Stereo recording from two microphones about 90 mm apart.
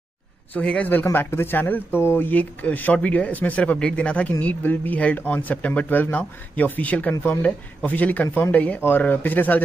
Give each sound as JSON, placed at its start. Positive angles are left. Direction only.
{"t": 0.6, "sound": "a man's voice", "side_deg": 15}